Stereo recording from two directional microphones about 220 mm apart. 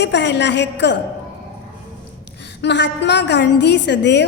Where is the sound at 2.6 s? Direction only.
50° left (ahead or behind).